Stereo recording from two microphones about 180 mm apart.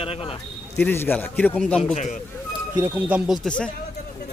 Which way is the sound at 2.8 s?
10° right (ahead or behind).